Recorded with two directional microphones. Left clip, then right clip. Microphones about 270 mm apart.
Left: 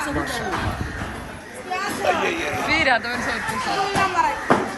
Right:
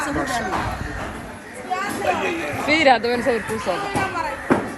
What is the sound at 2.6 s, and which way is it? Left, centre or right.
Speech, centre.